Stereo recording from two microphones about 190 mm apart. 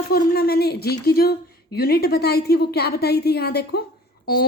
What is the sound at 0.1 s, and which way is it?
A woman's voice, 55° left (ahead or behind).